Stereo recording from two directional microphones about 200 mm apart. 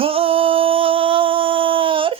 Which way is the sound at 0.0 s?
30° right (ahead or behind).